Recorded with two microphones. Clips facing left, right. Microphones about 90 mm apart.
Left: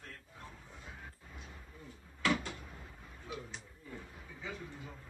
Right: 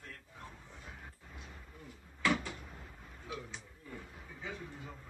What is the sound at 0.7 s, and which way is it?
Dog, 20° left (ahead or behind).